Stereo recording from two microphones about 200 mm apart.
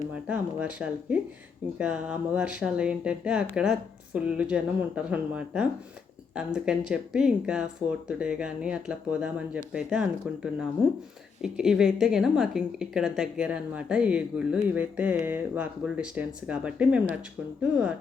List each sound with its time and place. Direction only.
0.1 s a woman's voice: 5° right (ahead or behind)